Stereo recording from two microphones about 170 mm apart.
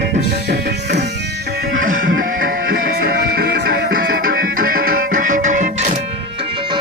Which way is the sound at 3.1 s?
60° right (ahead or behind).